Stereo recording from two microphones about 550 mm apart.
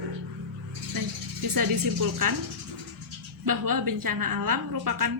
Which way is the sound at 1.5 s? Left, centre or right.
Right.